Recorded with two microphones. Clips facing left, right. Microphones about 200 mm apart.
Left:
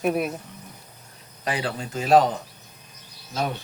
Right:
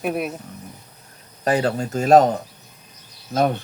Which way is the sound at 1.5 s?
45° right (ahead or behind).